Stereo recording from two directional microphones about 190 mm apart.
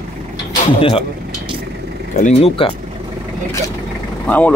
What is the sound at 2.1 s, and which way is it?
Speech, 40° left (ahead or behind).